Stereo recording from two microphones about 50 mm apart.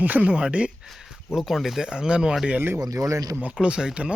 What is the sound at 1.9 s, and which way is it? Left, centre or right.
Speech, centre.